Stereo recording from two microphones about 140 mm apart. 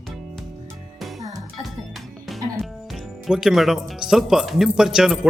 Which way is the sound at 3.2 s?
5° right (ahead or behind).